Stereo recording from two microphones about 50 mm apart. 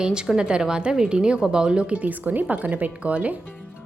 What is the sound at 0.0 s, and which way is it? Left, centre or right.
A woman's voice, centre.